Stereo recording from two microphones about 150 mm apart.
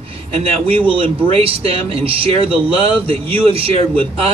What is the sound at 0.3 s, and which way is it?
Speech, 40° right (ahead or behind).